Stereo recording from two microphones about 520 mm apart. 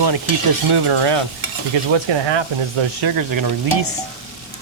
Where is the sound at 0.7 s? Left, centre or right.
Right.